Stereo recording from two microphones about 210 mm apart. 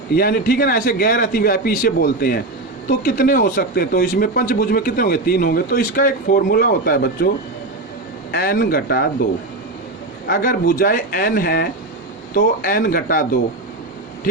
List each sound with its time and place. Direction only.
0.1 s speech: 45° left (ahead or behind)
8.3 s speech: 45° left (ahead or behind)
10.2 s speech: 40° left (ahead or behind)